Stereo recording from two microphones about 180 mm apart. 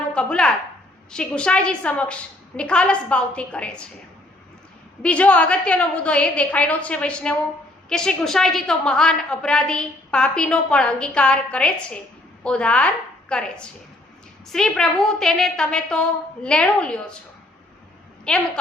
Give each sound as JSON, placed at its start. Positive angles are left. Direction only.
{"t": 0.1, "sound": "a woman's voice", "side_deg": 5}
{"t": 5.0, "sound": "a woman's voice", "side_deg": 5}
{"t": 18.3, "sound": "a woman's voice", "side_deg": 5}